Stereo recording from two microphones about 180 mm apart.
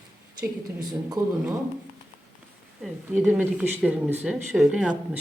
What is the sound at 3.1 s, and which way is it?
Speech, 10° right (ahead or behind).